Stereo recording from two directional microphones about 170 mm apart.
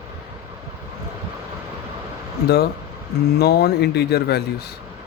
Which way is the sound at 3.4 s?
70° left (ahead or behind).